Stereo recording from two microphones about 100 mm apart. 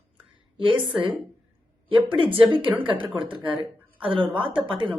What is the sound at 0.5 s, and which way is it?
Speech, 60° right (ahead or behind).